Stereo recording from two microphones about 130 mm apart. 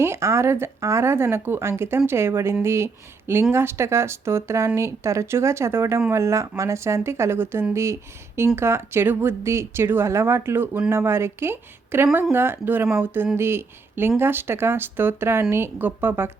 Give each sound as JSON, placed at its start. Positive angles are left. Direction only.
{"t": 0.0, "sound": "speech", "side_deg": -20}